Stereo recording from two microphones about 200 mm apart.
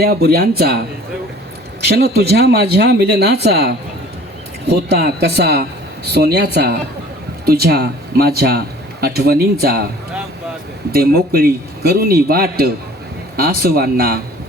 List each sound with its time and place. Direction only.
0.0 s a man's voice: 50° right (ahead or behind)
1.9 s a man's voice: 50° right (ahead or behind)
10.9 s a man's voice: 50° right (ahead or behind)